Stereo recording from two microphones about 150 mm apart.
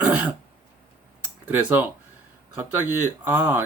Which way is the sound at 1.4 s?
15° right (ahead or behind).